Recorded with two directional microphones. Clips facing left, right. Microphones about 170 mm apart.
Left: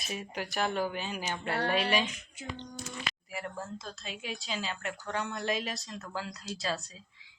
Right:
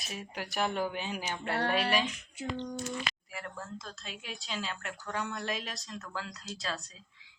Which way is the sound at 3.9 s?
Centre (ahead or behind).